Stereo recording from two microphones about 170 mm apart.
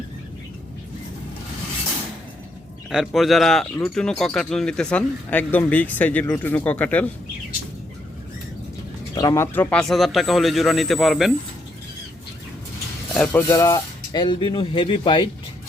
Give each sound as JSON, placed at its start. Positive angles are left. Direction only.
{"t": 2.9, "sound": "speech", "side_deg": 0}
{"t": 9.1, "sound": "speech", "side_deg": 20}
{"t": 13.2, "sound": "speech", "side_deg": 15}